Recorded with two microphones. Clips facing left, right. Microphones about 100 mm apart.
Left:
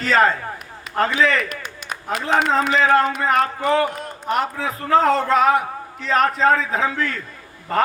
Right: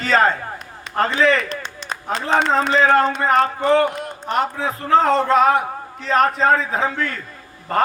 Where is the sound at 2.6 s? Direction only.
35° right (ahead or behind).